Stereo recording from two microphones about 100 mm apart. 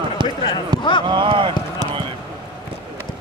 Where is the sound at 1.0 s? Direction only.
50° right (ahead or behind).